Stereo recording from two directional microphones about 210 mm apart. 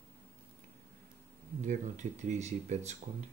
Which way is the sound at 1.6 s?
35° right (ahead or behind).